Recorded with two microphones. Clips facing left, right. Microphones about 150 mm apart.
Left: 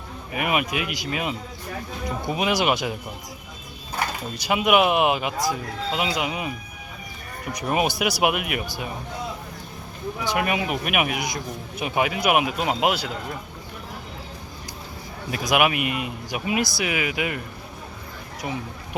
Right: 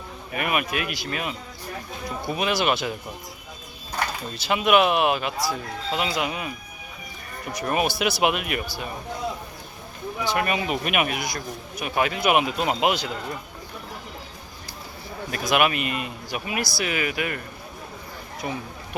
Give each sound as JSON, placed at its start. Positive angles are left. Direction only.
{"t": 0.3, "sound": "speech", "side_deg": 15}
{"t": 4.4, "sound": "speech", "side_deg": 15}
{"t": 7.5, "sound": "speech", "side_deg": 15}
{"t": 10.2, "sound": "speech", "side_deg": 15}
{"t": 15.3, "sound": "speech", "side_deg": 15}
{"t": 18.4, "sound": "speech", "side_deg": 5}